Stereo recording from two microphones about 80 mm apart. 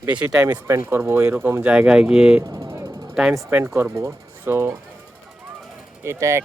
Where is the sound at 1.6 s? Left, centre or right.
Centre.